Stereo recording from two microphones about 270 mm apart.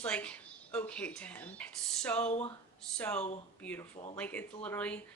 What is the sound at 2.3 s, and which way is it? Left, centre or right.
Speech, left.